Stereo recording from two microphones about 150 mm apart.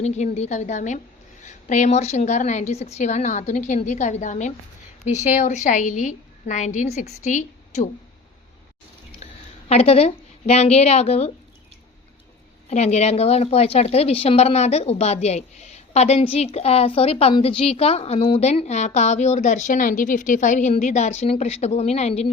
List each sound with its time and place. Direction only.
0.0 s a woman's voice: 50° left (ahead or behind)
9.2 s a woman's voice: 45° left (ahead or behind)
12.7 s a woman's voice: 50° left (ahead or behind)